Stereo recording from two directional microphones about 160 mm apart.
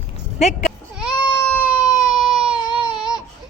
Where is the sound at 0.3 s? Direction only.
45° left (ahead or behind).